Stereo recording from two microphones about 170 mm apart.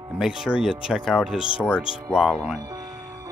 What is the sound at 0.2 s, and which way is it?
Speech, 5° right (ahead or behind).